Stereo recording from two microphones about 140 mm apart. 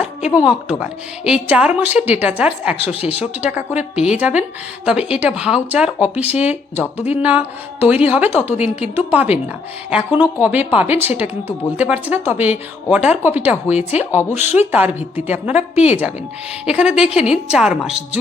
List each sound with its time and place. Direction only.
0.0 s a woman's voice: 10° right (ahead or behind)
2.8 s speech: 45° left (ahead or behind)
3.4 s a woman's voice: 10° right (ahead or behind)
15.7 s speech: 50° left (ahead or behind)
16.6 s a woman's voice: 5° right (ahead or behind)